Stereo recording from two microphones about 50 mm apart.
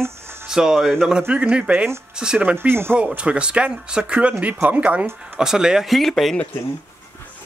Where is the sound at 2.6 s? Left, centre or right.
Right.